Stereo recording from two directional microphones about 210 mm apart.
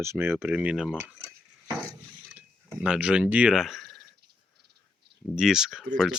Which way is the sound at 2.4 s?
5° right (ahead or behind).